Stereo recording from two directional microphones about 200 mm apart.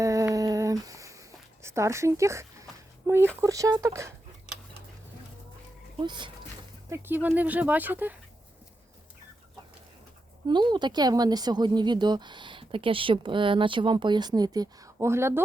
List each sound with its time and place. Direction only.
0.0 s a sound: 15° right (ahead or behind)
3.4 s speech: 15° right (ahead or behind)
6.0 s a woman's voice: 25° right (ahead or behind)
6.9 s speech: 10° right (ahead or behind)
10.4 s a woman's voice: 20° right (ahead or behind)